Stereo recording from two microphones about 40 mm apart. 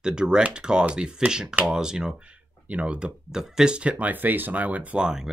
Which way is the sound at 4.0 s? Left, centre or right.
Right.